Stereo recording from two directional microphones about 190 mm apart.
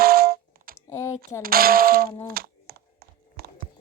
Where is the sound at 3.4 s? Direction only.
55° right (ahead or behind).